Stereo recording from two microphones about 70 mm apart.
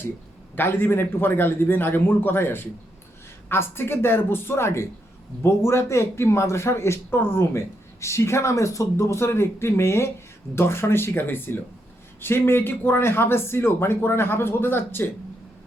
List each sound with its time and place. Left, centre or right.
0.5 s speech: left